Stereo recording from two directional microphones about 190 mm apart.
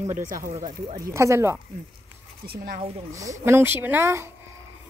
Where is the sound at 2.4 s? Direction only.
55° right (ahead or behind).